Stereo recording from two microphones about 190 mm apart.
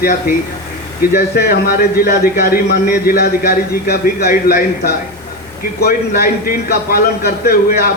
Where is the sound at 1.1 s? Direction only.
55° left (ahead or behind).